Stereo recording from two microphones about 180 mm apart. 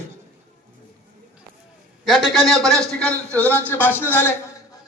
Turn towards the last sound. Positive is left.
turn(degrees=10)  # may be behind; listen again after turning